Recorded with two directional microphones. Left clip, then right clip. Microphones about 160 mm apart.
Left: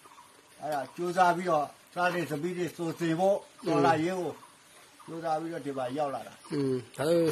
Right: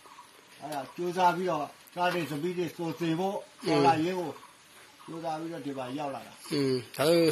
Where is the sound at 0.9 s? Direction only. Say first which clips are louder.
Even; 30° left (ahead or behind).